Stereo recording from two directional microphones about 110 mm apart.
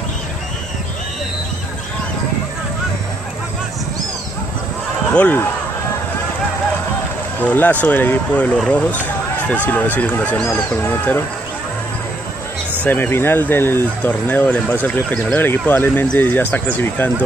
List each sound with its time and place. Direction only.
5.1 s speech: 15° left (ahead or behind)
7.3 s speech: 15° left (ahead or behind)
12.8 s speech: 20° left (ahead or behind)